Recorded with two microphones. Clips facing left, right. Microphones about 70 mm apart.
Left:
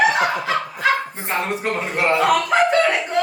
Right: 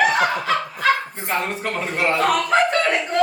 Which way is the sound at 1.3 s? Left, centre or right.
Centre.